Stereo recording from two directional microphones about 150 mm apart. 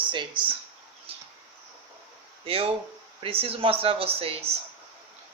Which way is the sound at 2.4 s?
40° right (ahead or behind).